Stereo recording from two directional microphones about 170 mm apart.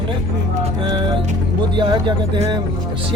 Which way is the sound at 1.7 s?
25° right (ahead or behind).